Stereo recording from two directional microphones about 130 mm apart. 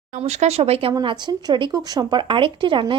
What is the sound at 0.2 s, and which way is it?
Speech, 55° right (ahead or behind).